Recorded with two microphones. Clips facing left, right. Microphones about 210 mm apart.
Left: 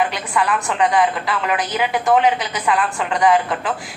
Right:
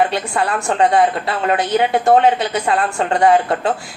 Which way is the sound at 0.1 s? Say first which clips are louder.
Right 2 dB; 30° right (ahead or behind).